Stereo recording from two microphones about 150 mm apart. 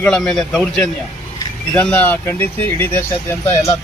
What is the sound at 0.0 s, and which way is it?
Speech, 5° left (ahead or behind).